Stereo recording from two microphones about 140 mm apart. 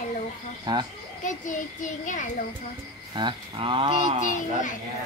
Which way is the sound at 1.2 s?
65° left (ahead or behind).